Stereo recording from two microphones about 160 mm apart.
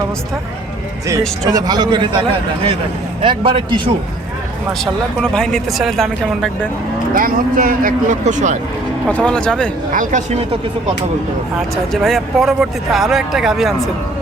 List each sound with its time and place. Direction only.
1.5 s a man's voice: 25° right (ahead or behind)
5.2 s speech: 5° left (ahead or behind)
7.1 s speech: 60° right (ahead or behind)
9.0 s speech: 5° left (ahead or behind)
9.9 s speech: 55° right (ahead or behind)
11.9 s speech: centre (ahead or behind)